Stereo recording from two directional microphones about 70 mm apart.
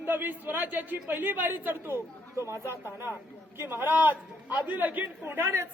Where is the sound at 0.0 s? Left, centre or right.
Right.